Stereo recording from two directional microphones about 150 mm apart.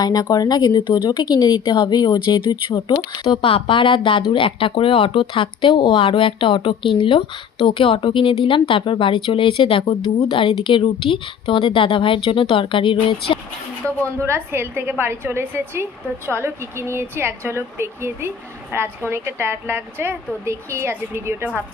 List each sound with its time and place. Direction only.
0.0 s speech: 25° left (ahead or behind)
14.2 s a woman's voice: 15° right (ahead or behind)